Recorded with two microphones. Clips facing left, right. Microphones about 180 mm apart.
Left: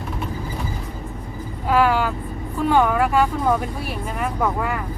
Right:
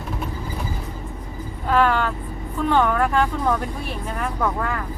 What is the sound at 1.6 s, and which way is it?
Vehicle, 10° left (ahead or behind).